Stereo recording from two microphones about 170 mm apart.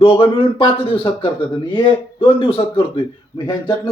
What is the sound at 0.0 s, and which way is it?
A man's voice, 35° left (ahead or behind).